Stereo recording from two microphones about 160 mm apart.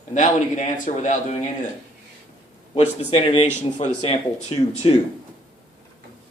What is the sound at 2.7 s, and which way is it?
Speech, 40° left (ahead or behind).